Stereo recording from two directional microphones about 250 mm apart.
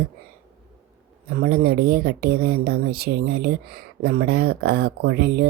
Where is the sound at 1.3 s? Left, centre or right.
Right.